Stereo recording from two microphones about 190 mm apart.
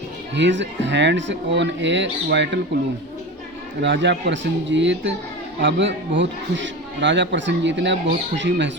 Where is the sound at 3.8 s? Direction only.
70° right (ahead or behind).